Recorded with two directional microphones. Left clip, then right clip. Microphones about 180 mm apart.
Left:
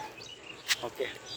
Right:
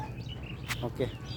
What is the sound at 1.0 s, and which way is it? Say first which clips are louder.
Speech: right 1 dB; 20° right (ahead or behind).